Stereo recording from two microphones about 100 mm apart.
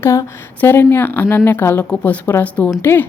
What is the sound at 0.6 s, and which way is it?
A woman's voice, 20° left (ahead or behind).